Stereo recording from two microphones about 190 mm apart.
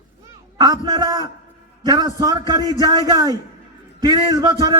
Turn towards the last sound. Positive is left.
turn(degrees=-20)  # may be behind; listen again after turning